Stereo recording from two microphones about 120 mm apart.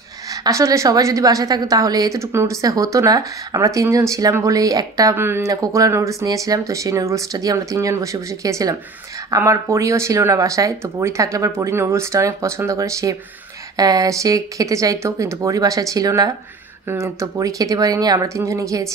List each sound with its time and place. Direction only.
0.3 s speech: 30° right (ahead or behind)
5.1 s speech: 20° right (ahead or behind)